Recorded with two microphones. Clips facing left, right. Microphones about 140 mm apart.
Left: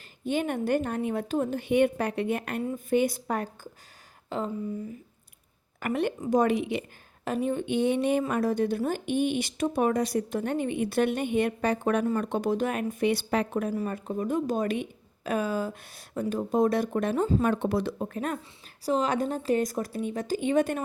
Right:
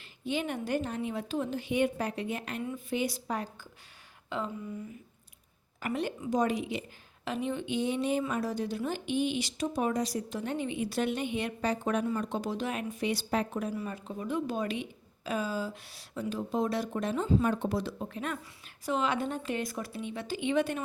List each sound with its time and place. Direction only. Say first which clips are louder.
0.3 s speech: left 5 dB; 50° left (ahead or behind)
2.6 s speech: left 8 dB; 45° left (ahead or behind)
4.3 s a sound: left 4 dB; 40° left (ahead or behind)
5.8 s speech: left 5 dB; 60° left (ahead or behind)
7.3 s speech: left 5 dB; 45° left (ahead or behind)
17.4 s a woman's voice: left 4 dB; 60° left (ahead or behind); by 20.8 s 45° left (ahead or behind)